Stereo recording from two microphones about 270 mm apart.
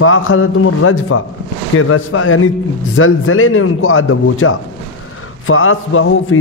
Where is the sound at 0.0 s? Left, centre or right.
Left.